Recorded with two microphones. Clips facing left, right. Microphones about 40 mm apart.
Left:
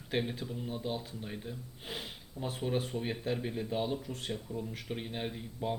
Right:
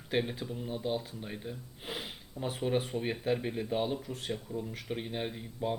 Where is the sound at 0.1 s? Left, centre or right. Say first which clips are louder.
Right 2 dB; centre.